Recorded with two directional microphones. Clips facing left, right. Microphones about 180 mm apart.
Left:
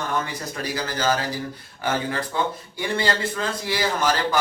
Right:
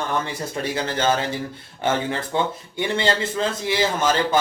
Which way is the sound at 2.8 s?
25° right (ahead or behind).